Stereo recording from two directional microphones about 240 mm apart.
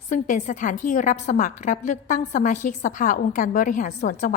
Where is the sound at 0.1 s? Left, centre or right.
Left.